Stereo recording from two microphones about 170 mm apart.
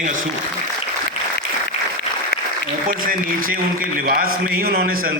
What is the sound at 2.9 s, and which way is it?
Speech, 55° right (ahead or behind).